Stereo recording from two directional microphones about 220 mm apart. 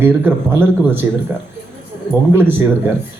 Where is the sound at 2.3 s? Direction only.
10° right (ahead or behind).